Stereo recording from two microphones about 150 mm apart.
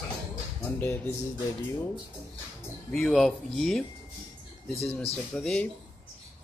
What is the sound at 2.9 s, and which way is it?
Speech, centre (ahead or behind).